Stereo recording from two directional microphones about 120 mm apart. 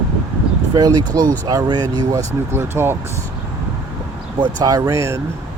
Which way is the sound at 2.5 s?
20° right (ahead or behind).